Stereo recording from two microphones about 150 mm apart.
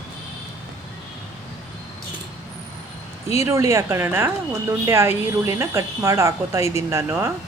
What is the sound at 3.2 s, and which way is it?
Speech, 20° right (ahead or behind).